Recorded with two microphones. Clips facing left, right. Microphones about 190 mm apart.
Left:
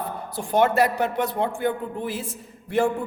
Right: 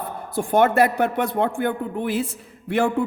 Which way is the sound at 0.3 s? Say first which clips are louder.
Right 3 dB; 55° right (ahead or behind).